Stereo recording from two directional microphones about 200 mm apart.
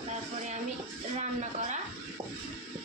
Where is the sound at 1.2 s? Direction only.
35° right (ahead or behind).